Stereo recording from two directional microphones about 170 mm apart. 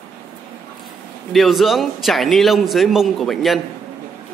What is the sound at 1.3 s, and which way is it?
A man's voice, centre (ahead or behind).